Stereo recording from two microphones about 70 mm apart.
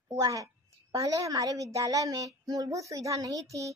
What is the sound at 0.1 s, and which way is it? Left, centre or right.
A woman's voice, right.